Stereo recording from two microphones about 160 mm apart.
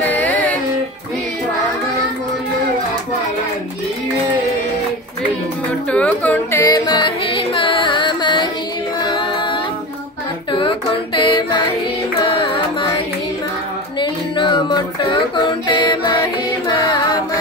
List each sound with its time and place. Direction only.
0.0 s music: 10° left (ahead or behind)
5.9 s speech: 10° left (ahead or behind)
6.6 s music: 25° left (ahead or behind)
10.5 s a sound: 30° left (ahead or behind)
12.2 s music: 30° left (ahead or behind)
13.9 s music: 30° left (ahead or behind)